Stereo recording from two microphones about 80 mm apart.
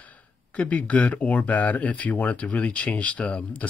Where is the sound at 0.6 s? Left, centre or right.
Centre.